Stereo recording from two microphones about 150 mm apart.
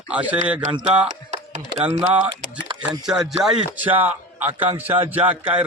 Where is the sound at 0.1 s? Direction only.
10° right (ahead or behind).